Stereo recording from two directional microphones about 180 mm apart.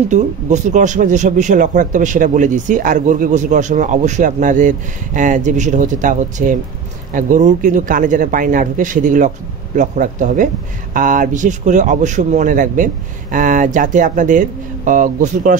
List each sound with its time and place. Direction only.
0.1 s speech: 40° right (ahead or behind)